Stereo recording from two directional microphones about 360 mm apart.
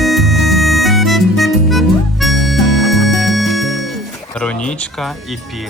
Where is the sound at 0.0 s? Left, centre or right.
Centre.